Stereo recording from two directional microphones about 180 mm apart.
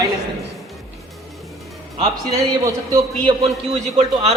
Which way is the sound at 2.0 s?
20° right (ahead or behind).